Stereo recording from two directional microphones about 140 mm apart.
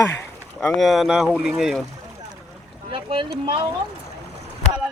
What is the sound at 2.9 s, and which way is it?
Speech, 40° right (ahead or behind).